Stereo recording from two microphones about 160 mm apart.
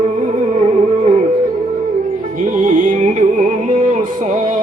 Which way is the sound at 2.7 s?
55° right (ahead or behind).